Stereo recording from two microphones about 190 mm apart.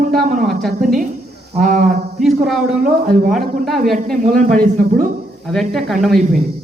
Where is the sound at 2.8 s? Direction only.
45° right (ahead or behind).